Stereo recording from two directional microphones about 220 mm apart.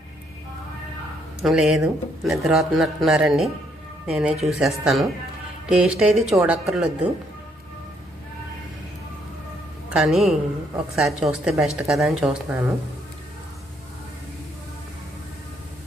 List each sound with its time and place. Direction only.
1.4 s speech: centre (ahead or behind)
9.9 s speech: centre (ahead or behind)